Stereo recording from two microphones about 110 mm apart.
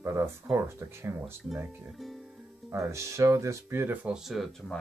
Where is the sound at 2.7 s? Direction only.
25° right (ahead or behind).